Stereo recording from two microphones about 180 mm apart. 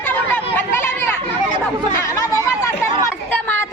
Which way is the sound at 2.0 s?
15° left (ahead or behind).